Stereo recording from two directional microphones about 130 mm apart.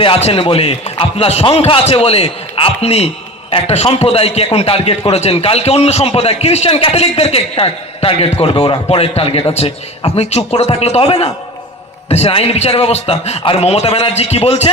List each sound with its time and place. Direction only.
0.0 s a man's voice: 50° left (ahead or behind)